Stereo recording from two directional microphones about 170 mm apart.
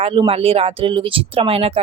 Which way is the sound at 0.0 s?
35° right (ahead or behind).